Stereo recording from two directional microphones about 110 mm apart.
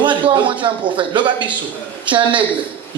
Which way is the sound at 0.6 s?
50° right (ahead or behind).